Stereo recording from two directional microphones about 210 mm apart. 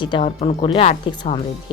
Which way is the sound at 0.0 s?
25° left (ahead or behind).